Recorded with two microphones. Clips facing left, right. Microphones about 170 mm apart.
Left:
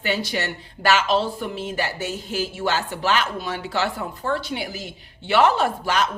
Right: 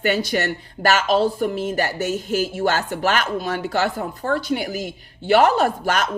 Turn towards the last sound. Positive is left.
turn(degrees=-50)  # may be behind; listen again after turning